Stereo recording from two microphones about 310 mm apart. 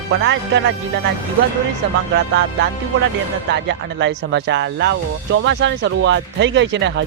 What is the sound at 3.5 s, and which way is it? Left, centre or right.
Speech, right.